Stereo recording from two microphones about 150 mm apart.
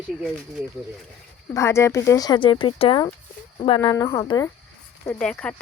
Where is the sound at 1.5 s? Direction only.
20° left (ahead or behind); by 3.8 s 40° left (ahead or behind).